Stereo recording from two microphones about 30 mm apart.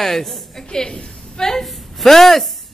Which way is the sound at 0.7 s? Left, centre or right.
Left.